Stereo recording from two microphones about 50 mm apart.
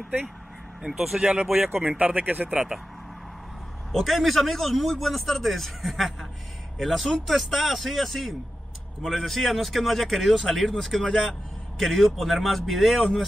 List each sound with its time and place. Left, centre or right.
0.8 s a man's voice: centre
1.2 s speech: centre
1.5 s speech: right
1.9 s speech: right
2.1 s speech: right
3.9 s a man's voice: centre